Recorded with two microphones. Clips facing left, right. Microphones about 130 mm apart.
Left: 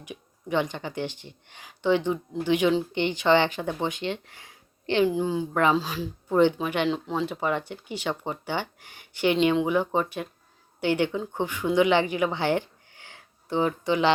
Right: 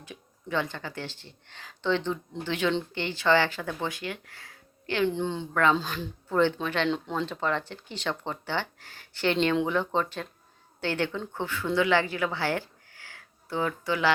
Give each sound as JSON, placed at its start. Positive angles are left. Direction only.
{"t": 0.0, "sound": "speech", "side_deg": 15}
{"t": 5.0, "sound": "speech", "side_deg": 10}
{"t": 6.2, "sound": "speech", "side_deg": 15}